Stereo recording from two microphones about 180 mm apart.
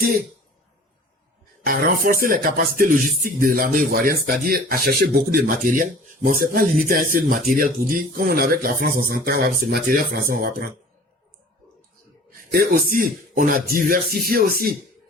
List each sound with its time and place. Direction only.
1.6 s speech: 55° right (ahead or behind)
12.5 s speech: 50° right (ahead or behind)